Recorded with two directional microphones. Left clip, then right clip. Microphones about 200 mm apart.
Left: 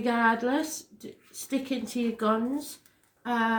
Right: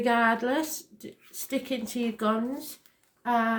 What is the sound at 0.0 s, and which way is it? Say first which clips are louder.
A woman's voice: right 1 dB; 40° right (ahead or behind).